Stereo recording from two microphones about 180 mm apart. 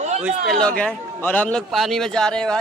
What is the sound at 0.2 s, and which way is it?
A man's voice, centre (ahead or behind).